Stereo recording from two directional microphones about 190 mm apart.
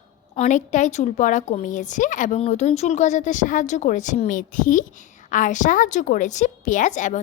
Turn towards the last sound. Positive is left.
turn(degrees=40)  # may be behind; listen again after turning